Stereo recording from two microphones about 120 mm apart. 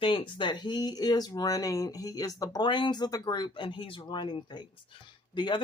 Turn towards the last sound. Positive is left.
turn(degrees=40)  # may be behind; listen again after turning